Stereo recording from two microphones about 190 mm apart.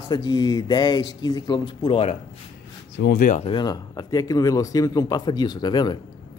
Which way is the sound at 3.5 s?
20° left (ahead or behind).